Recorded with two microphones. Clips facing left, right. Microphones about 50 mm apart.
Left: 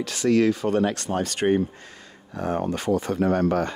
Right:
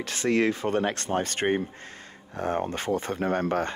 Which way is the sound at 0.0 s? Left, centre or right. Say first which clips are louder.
Left 4 dB; right.